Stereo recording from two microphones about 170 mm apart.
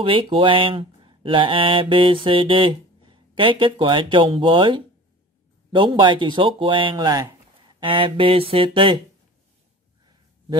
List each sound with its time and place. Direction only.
0.0 s speech: 30° right (ahead or behind)